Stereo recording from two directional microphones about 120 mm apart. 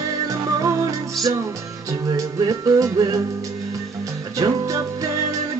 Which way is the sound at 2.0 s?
30° right (ahead or behind).